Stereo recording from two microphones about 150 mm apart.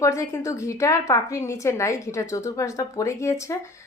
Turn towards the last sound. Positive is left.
turn(degrees=20)  # may be behind; listen again after turning